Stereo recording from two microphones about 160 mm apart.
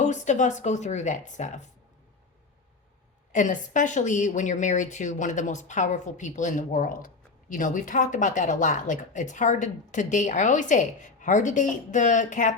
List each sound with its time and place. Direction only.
0.0 s speech: 45° left (ahead or behind)
3.3 s speech: 50° left (ahead or behind)